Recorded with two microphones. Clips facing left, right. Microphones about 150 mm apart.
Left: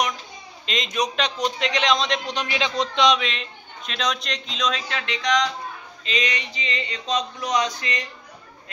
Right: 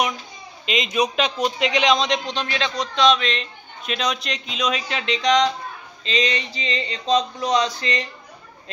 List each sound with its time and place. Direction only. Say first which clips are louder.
0.7 s a man's voice: right 4 dB; 5° right (ahead or behind)
2.3 s speech: even; 15° left (ahead or behind)
3.8 s speech: right 2 dB; 5° right (ahead or behind); by 8.1 s 30° right (ahead or behind)